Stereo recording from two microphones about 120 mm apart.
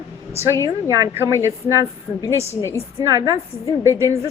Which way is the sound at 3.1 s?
25° right (ahead or behind).